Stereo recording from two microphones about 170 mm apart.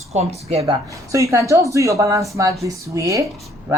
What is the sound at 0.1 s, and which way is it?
Speech, 40° right (ahead or behind).